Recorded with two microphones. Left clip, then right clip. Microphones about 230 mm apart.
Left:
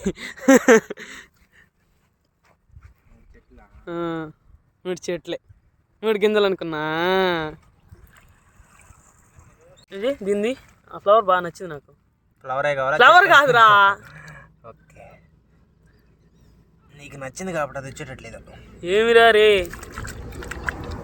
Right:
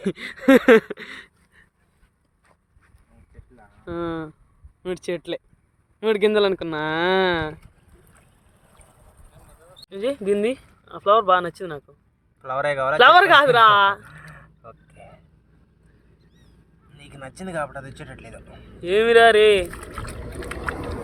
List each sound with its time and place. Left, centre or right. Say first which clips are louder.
0.0 s speech: even; centre
3.3 s a sound: right 1 dB; centre
4.8 s speech: even; centre
8.4 s boat: left 2 dB; right
9.0 s a sound: right 2 dB; right
9.9 s speech: even; centre
12.4 s a man's voice: left 1 dB; centre
13.0 s speech: even; centre
14.0 s a sound: left 1 dB; centre
16.9 s speech: left 5 dB; left
18.5 s speech: even; centre
20.1 s boat: right 2 dB; right